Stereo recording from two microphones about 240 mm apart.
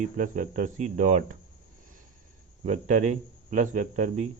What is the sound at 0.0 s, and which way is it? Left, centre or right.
Speech, right.